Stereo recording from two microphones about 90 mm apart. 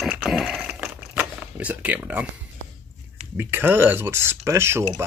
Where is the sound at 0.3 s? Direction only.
5° right (ahead or behind).